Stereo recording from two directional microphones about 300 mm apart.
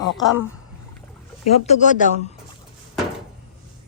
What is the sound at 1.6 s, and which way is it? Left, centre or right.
Speech, left.